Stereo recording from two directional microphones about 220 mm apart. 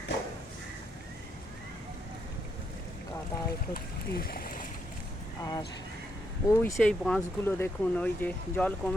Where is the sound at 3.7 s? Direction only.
45° left (ahead or behind).